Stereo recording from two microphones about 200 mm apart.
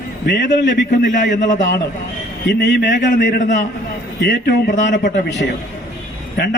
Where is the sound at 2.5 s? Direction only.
60° left (ahead or behind).